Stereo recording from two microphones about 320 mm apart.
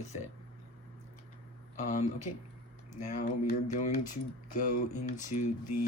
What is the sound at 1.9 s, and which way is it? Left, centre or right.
Speech, left.